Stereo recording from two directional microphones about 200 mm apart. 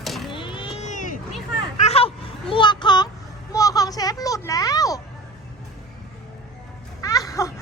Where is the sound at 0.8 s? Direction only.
35° left (ahead or behind); by 5.0 s 15° left (ahead or behind).